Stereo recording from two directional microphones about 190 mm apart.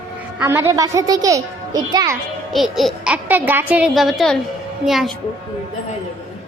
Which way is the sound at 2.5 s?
Centre (ahead or behind).